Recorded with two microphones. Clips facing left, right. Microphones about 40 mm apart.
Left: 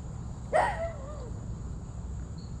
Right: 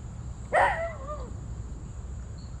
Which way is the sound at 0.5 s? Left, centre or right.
Right.